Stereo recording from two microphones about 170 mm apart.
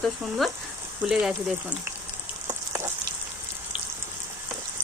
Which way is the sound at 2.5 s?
20° right (ahead or behind).